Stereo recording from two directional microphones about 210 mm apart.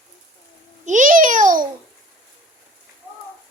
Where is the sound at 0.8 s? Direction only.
40° right (ahead or behind).